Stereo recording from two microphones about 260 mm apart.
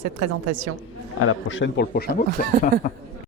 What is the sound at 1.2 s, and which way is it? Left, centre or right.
Speech, left.